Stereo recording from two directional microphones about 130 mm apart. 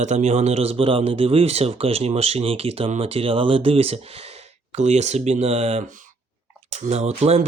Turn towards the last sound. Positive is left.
turn(degrees=-50)  # may be behind; listen again after turning